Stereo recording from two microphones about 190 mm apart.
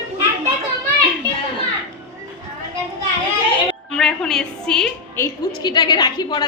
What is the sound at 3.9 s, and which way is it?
Music, 5° left (ahead or behind).